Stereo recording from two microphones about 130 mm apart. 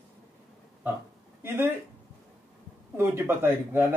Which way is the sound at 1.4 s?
15° right (ahead or behind).